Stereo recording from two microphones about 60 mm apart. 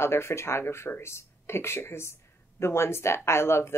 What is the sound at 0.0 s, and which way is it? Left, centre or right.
Speech, left.